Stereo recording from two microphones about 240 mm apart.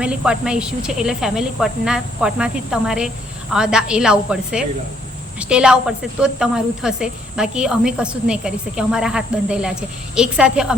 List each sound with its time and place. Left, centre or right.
0.0 s speech: centre